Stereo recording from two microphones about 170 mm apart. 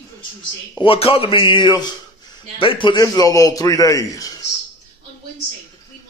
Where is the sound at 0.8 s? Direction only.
35° left (ahead or behind).